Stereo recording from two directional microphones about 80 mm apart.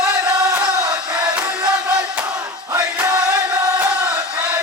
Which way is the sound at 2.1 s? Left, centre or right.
Centre.